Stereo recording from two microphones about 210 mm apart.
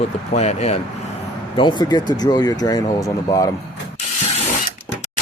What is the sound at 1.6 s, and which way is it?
Speech, 20° left (ahead or behind).